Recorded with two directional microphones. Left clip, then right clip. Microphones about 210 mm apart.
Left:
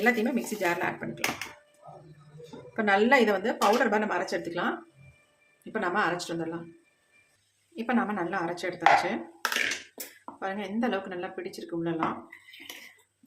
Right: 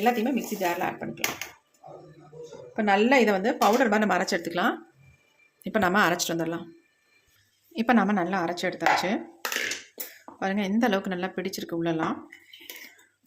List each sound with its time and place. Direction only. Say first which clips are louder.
0.0 s speech: right 1 dB; 20° right (ahead or behind)
2.7 s speech: right 1 dB; 20° right (ahead or behind); by 4.7 s 40° right (ahead or behind)
5.7 s speech: right 5 dB; 45° right (ahead or behind)
7.8 s a woman's voice: right 5 dB; 40° right (ahead or behind)
10.4 s speech: right 5 dB; 40° right (ahead or behind)